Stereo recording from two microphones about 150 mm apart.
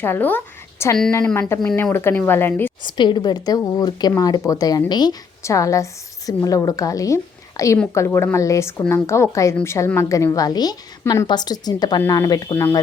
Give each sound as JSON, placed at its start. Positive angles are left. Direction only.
{"t": 0.0, "sound": "a woman's voice", "side_deg": 15}
{"t": 2.8, "sound": "a woman's voice", "side_deg": 30}